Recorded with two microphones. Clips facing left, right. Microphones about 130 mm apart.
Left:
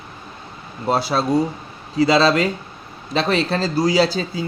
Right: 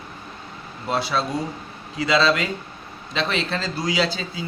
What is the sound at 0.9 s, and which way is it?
Speech, 40° left (ahead or behind).